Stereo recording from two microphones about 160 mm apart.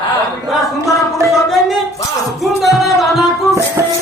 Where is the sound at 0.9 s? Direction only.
20° left (ahead or behind).